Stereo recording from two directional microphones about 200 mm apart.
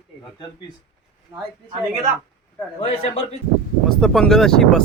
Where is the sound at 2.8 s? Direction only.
30° left (ahead or behind).